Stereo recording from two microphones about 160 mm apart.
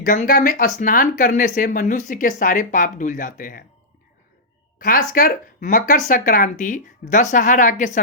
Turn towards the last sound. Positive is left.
turn(degrees=55)  # may be behind; listen again after turning